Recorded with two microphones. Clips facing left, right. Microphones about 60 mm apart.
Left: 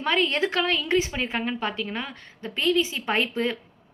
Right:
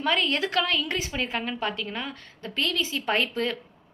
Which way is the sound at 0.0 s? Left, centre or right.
Left.